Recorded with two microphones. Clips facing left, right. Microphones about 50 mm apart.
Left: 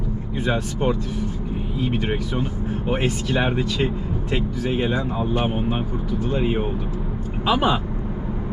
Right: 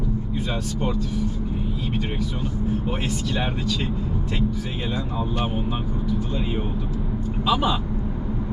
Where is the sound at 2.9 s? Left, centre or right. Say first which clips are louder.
Left 4 dB; left.